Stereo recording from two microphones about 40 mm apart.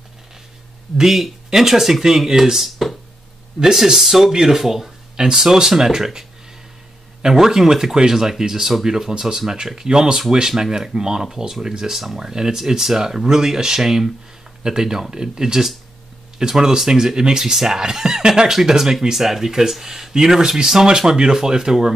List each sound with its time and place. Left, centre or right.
0.9 s speech: centre